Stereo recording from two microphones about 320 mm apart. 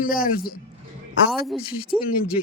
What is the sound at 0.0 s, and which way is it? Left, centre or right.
Speech, left.